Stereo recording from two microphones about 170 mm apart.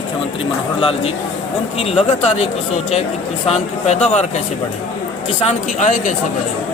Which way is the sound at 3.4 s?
40° left (ahead or behind).